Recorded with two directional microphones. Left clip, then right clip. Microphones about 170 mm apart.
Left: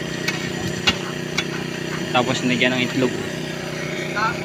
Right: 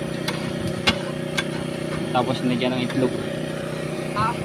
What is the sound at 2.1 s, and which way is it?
Speech, 10° right (ahead or behind).